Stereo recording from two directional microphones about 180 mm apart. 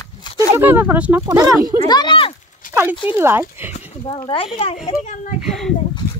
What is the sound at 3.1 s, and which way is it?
Speech, 10° right (ahead or behind).